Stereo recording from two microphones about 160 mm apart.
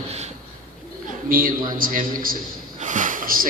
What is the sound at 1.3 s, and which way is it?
A man's voice, 65° right (ahead or behind).